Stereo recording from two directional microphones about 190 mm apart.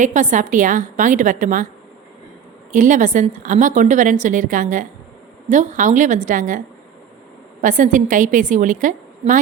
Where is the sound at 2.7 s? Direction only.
45° right (ahead or behind).